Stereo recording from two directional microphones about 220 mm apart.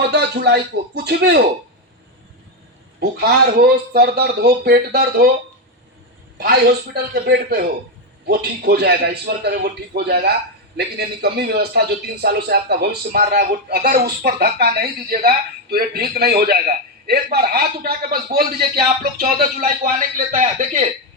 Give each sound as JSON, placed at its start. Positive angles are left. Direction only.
{"t": 0.1, "sound": "speech", "side_deg": -50}
{"t": 3.6, "sound": "speech", "side_deg": -45}
{"t": 6.3, "sound": "a man's voice", "side_deg": -45}